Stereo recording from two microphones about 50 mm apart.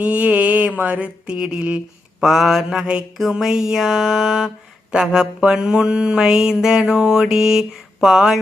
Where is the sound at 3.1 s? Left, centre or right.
Centre.